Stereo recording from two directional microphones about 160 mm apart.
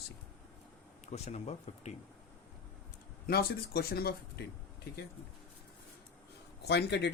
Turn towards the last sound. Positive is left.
turn(degrees=90)